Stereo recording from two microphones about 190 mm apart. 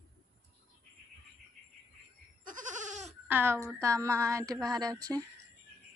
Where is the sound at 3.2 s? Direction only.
10° right (ahead or behind).